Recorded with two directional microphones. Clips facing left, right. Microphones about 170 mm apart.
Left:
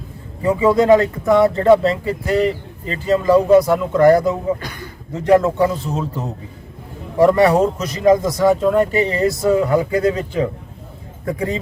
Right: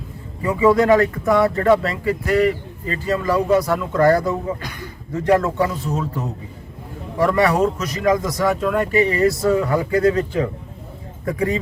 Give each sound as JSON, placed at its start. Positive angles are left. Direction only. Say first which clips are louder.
{"t": 0.4, "sound": "speech", "louder": "left 2 dB", "side_deg": 25}
{"t": 7.2, "sound": "speech", "louder": "left 4 dB", "side_deg": 25}